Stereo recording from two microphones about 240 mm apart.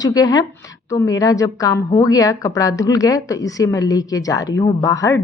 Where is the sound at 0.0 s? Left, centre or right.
Centre.